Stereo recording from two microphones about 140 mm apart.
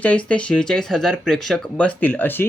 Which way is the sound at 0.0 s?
10° left (ahead or behind).